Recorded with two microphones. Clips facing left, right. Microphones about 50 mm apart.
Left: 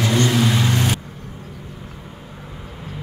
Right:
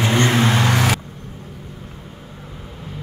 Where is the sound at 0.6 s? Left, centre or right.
Right.